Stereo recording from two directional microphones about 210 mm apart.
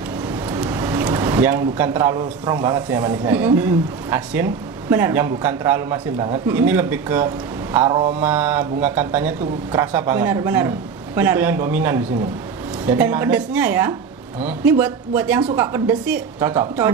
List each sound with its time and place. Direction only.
0.6 s a sound: 15° right (ahead or behind)
2.1 s a man's voice: 20° right (ahead or behind)
3.3 s speech: 10° right (ahead or behind)
7.8 s a man's voice: 25° right (ahead or behind)
8.2 s speech: 10° right (ahead or behind)